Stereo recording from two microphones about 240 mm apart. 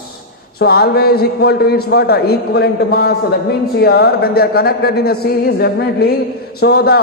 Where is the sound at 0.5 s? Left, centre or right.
Left.